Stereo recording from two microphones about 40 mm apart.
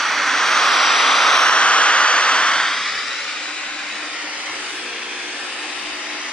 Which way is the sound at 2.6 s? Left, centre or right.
Centre.